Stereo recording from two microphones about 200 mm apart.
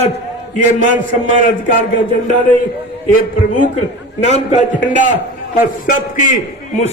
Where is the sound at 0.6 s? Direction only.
40° left (ahead or behind).